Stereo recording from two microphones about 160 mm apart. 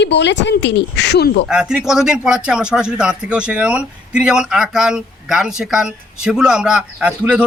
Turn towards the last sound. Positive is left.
turn(degrees=-10)  # may be behind; listen again after turning